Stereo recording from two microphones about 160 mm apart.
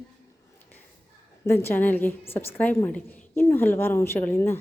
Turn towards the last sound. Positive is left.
turn(degrees=10)  # may be behind; listen again after turning